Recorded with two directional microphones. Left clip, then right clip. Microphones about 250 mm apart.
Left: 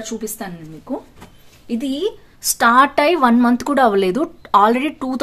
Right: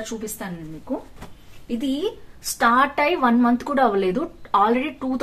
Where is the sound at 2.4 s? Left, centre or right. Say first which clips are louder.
Left 5 dB; left.